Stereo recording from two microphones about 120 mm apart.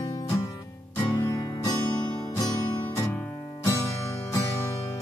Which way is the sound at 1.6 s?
30° left (ahead or behind).